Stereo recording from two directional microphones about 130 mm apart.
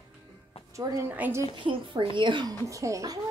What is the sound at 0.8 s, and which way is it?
Speech, 25° right (ahead or behind).